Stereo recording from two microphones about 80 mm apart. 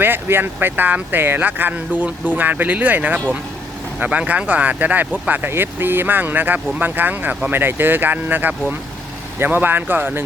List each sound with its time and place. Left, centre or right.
0.0 s speech: right